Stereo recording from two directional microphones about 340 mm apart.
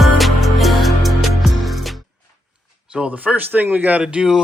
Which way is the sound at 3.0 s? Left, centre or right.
Centre.